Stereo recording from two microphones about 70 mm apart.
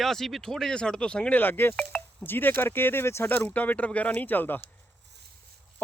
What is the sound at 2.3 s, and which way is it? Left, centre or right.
Speech, left.